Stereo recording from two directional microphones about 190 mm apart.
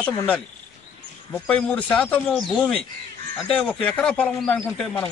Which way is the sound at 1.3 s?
10° left (ahead or behind).